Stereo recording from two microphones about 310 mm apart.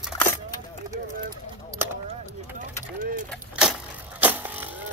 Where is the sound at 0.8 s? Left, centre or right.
Centre.